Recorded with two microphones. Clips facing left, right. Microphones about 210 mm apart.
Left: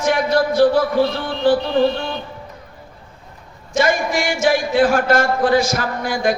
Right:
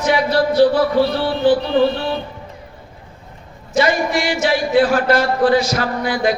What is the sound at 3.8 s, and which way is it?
A man's voice, 50° left (ahead or behind).